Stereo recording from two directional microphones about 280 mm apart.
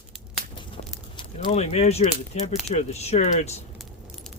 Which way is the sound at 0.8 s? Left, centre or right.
Left.